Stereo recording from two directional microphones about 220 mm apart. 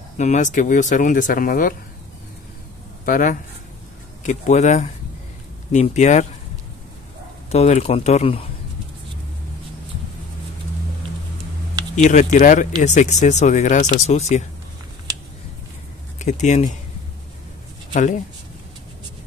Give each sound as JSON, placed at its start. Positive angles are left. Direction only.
{"t": 0.2, "sound": "speech", "side_deg": 35}
{"t": 3.1, "sound": "speech", "side_deg": 40}
{"t": 7.5, "sound": "speech", "side_deg": 30}
{"t": 11.9, "sound": "speech", "side_deg": 35}
{"t": 16.2, "sound": "speech", "side_deg": 30}
{"t": 17.9, "sound": "speech", "side_deg": 35}